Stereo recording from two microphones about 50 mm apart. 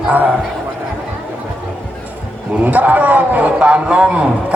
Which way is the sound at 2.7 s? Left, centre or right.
Right.